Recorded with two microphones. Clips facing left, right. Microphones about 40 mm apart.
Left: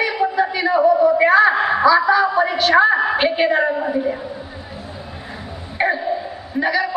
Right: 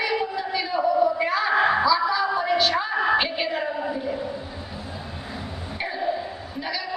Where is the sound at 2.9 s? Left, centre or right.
Left.